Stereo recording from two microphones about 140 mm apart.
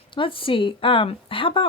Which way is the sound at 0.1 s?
35° left (ahead or behind).